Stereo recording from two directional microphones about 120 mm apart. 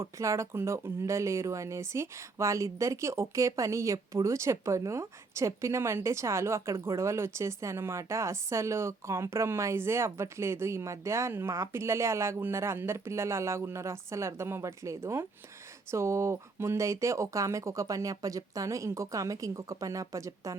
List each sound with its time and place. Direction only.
0.0 s speech: 25° right (ahead or behind)